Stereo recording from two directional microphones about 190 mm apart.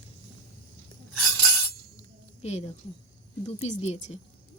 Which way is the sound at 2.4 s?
35° left (ahead or behind).